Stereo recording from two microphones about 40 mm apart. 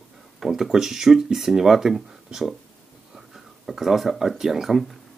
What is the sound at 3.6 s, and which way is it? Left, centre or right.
Speech, centre.